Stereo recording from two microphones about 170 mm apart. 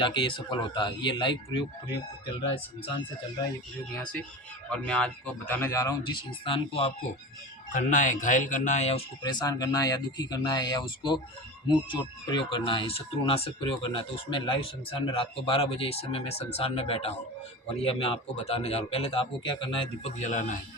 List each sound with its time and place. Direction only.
0.0 s speech: 30° left (ahead or behind)
4.7 s a man's voice: 5° left (ahead or behind)
6.4 s speech: 35° left (ahead or behind)
7.7 s speech: 50° left (ahead or behind)
9.2 s speech: 25° left (ahead or behind); by 20.6 s 45° left (ahead or behind)